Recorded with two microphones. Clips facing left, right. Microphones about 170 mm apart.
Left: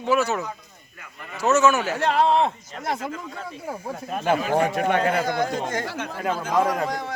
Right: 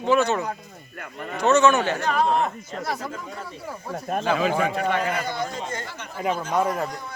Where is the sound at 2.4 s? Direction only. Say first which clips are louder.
Left 2 dB; 25° left (ahead or behind).